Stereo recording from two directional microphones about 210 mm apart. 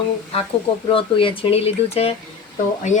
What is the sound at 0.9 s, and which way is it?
Speech, 25° left (ahead or behind).